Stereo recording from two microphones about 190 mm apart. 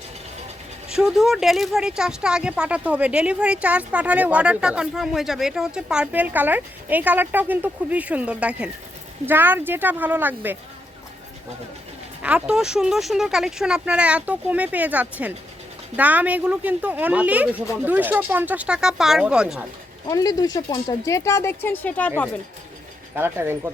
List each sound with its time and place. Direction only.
0.9 s speech: centre (ahead or behind)
12.2 s speech: 5° right (ahead or behind)
20.1 s speech: 20° left (ahead or behind)
23.1 s speech: 10° right (ahead or behind)